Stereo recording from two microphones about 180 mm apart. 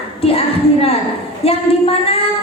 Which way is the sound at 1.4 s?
35° left (ahead or behind).